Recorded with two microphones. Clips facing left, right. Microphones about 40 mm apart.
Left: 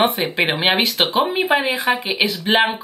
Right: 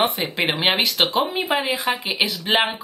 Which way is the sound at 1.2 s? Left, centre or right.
Centre.